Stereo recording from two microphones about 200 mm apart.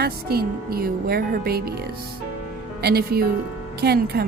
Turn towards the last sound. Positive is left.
turn(degrees=-55)  # may be behind; listen again after turning